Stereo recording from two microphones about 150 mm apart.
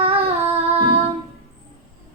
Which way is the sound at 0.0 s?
40° right (ahead or behind).